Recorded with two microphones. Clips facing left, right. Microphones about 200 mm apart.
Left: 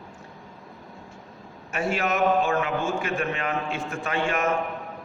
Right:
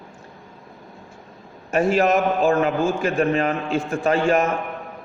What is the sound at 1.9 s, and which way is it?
A man's voice, 40° right (ahead or behind).